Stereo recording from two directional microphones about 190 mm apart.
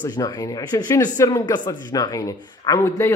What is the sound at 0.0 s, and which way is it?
Speech, 20° left (ahead or behind).